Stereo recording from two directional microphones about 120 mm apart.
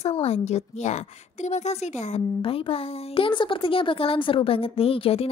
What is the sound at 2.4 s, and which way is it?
Speech, 50° left (ahead or behind).